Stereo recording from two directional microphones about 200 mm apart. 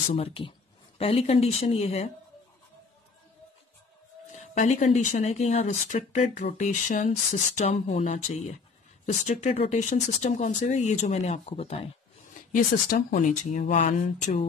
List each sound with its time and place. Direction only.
0.1 s speech: 25° left (ahead or behind)
4.3 s speech: 35° left (ahead or behind)
12.5 s speech: 40° left (ahead or behind)